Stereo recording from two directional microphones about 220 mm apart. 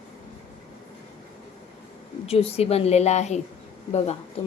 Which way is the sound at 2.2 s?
25° left (ahead or behind).